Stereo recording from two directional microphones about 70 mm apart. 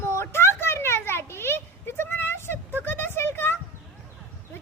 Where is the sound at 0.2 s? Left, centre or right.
Left.